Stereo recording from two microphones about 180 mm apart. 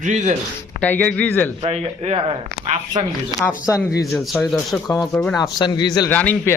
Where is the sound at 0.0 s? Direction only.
45° right (ahead or behind).